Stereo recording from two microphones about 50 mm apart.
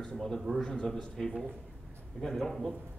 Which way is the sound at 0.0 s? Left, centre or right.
Centre.